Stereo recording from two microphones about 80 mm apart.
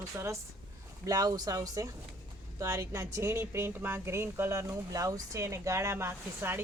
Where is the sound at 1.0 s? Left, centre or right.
Right.